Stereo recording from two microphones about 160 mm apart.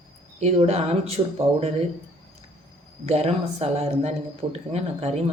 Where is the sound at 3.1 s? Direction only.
40° right (ahead or behind).